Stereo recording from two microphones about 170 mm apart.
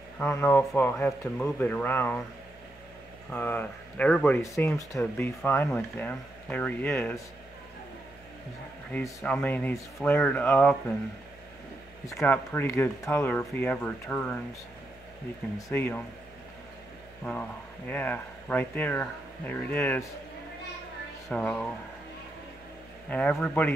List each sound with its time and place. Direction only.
0.2 s speech: 10° left (ahead or behind)
3.3 s speech: 10° left (ahead or behind)
8.9 s speech: 10° left (ahead or behind)
12.2 s speech: 10° left (ahead or behind)
15.5 s speech: 15° left (ahead or behind)
17.2 s speech: 5° left (ahead or behind)
21.3 s speech: 5° left (ahead or behind)
23.0 s speech: 10° left (ahead or behind)